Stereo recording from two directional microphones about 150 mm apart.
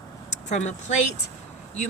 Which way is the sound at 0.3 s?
50° left (ahead or behind).